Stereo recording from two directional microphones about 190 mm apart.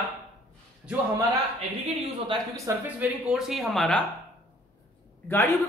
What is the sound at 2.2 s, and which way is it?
Speech, 15° right (ahead or behind).